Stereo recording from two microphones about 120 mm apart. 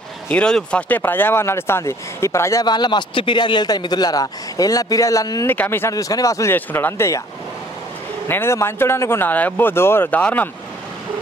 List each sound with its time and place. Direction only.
0.3 s speech: 5° left (ahead or behind); by 2.6 s 25° left (ahead or behind)
2.6 s a man's voice: 35° left (ahead or behind)
5.5 s speech: 20° left (ahead or behind)
6.5 s speech: 15° left (ahead or behind)
8.3 s speech: 20° left (ahead or behind)